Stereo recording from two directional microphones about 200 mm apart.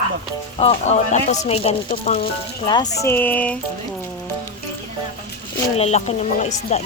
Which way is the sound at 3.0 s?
10° left (ahead or behind).